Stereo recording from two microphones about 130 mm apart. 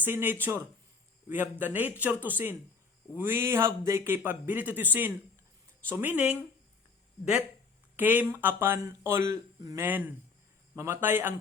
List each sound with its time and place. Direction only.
0.0 s speech: 15° right (ahead or behind)
7.9 s speech: 15° right (ahead or behind)
9.8 s speech: 15° right (ahead or behind)